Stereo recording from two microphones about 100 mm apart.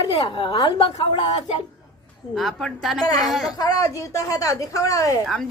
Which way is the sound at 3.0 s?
40° left (ahead or behind).